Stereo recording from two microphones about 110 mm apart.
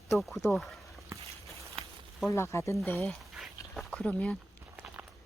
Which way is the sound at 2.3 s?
25° left (ahead or behind).